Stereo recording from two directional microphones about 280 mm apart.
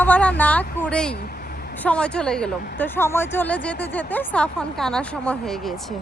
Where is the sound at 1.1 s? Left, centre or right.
Left.